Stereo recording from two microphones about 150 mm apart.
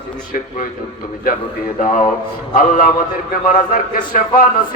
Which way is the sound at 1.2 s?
70° left (ahead or behind).